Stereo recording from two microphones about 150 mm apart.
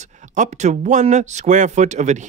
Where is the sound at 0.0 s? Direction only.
55° right (ahead or behind).